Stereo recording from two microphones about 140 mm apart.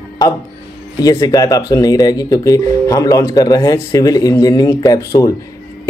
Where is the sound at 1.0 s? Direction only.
25° left (ahead or behind).